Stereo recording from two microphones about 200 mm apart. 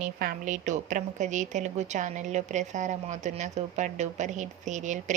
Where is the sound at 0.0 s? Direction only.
45° right (ahead or behind).